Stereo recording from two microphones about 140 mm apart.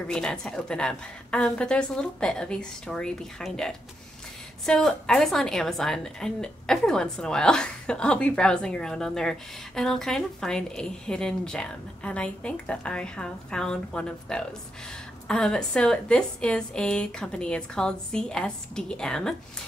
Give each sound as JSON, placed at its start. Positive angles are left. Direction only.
{"t": 0.1, "sound": "a woman's voice", "side_deg": 5}